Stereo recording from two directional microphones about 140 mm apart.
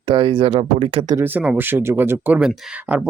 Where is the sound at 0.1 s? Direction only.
40° right (ahead or behind).